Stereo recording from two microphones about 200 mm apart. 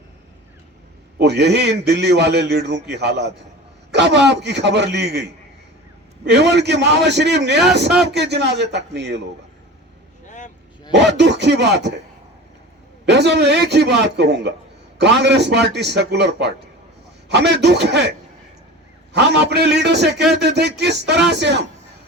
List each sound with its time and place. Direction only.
1.2 s a man's voice: 60° right (ahead or behind)
10.2 s vehicle: 40° left (ahead or behind)
10.9 s a man's voice: 60° right (ahead or behind)
13.1 s a man's voice: 60° right (ahead or behind)
19.1 s a man's voice: 60° right (ahead or behind)